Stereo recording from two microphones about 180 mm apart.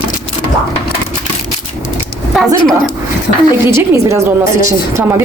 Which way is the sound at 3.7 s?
15° right (ahead or behind).